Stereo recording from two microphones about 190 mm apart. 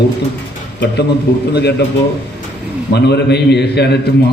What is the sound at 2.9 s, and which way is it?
A man's voice, 60° left (ahead or behind).